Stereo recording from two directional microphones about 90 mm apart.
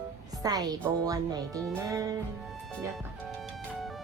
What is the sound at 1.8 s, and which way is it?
Music, 40° right (ahead or behind).